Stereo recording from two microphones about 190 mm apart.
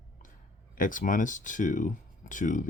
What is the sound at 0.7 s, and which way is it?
Speech, 45° left (ahead or behind).